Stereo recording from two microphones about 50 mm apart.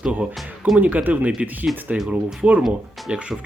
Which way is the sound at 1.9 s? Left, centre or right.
Centre.